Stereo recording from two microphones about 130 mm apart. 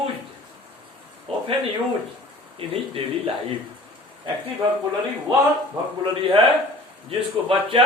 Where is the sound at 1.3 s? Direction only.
50° right (ahead or behind).